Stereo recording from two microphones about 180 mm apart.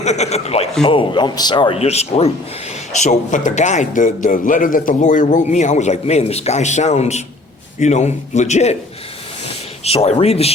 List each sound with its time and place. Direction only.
0.0 s a man's voice: 40° left (ahead or behind)
9.8 s a man's voice: 35° left (ahead or behind)